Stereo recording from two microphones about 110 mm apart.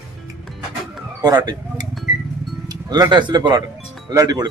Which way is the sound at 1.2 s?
35° right (ahead or behind).